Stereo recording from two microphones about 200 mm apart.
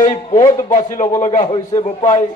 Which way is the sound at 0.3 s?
20° left (ahead or behind).